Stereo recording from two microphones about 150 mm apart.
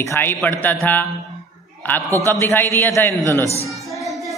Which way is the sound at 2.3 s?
15° left (ahead or behind).